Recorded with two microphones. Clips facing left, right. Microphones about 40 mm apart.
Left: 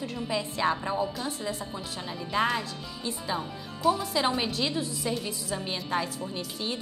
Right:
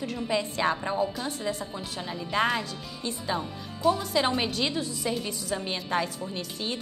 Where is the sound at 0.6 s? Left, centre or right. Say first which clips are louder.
Left 1 dB; centre.